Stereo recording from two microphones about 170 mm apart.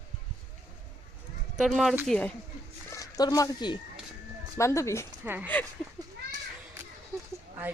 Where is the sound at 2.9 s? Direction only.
20° left (ahead or behind).